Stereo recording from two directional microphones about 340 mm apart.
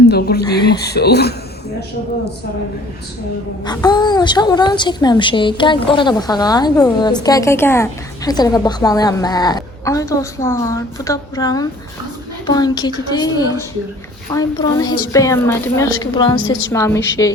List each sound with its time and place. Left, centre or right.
0.1 s speech: left
0.4 s a woman's voice: centre
0.8 s speech: left
3.6 s a woman's voice: centre
16.4 s a woman's voice: left
16.7 s a woman's voice: centre